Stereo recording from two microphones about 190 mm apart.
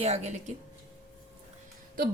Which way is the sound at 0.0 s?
35° right (ahead or behind).